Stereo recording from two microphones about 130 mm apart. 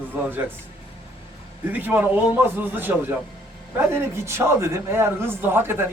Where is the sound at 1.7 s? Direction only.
15° right (ahead or behind).